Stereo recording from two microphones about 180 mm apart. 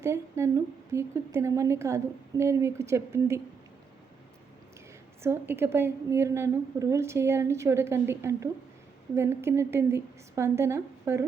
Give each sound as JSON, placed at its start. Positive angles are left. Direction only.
{"t": 0.0, "sound": "a woman's voice", "side_deg": -15}
{"t": 5.2, "sound": "a woman's voice", "side_deg": -15}